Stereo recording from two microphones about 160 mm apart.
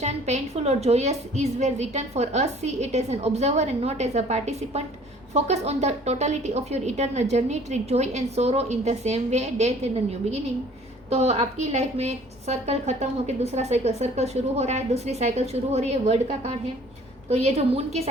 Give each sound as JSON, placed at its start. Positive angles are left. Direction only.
{"t": 0.0, "sound": "a woman's voice", "side_deg": -45}